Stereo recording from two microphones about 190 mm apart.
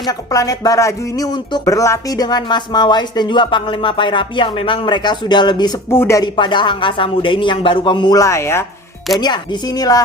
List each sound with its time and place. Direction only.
0.0 s speech: 20° left (ahead or behind)